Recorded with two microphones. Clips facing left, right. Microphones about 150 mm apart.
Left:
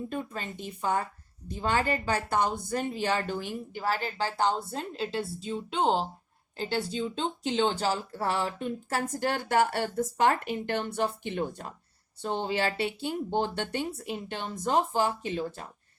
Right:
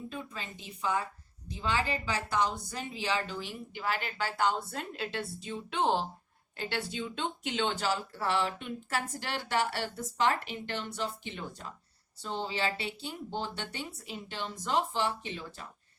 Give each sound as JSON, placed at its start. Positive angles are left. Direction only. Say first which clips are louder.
{"t": 0.1, "sound": "speech", "louder": "left 6 dB", "side_deg": 50}